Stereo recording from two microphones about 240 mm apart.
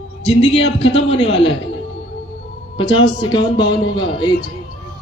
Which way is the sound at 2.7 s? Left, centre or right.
Left.